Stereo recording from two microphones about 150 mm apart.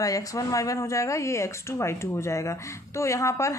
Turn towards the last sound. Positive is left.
turn(degrees=20)  # may be behind; listen again after turning